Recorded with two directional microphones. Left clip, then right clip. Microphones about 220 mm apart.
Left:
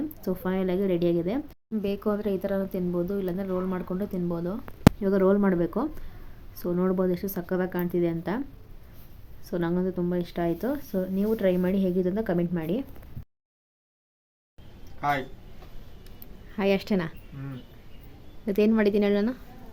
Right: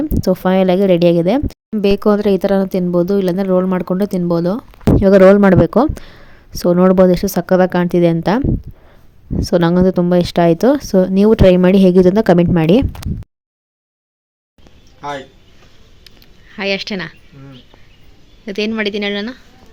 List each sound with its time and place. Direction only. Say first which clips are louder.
0.1 s speech: right 16 dB; 40° right (ahead or behind)
16.5 s a woman's voice: right 7 dB; 5° left (ahead or behind)
18.4 s a woman's voice: right 4 dB; centre (ahead or behind)